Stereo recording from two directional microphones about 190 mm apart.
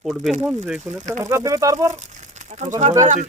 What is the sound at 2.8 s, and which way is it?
Speech, 40° right (ahead or behind).